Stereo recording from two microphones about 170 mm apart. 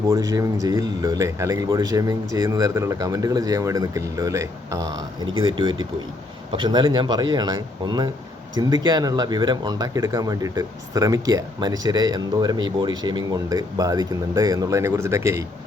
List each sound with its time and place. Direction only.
0.1 s speech: 20° right (ahead or behind)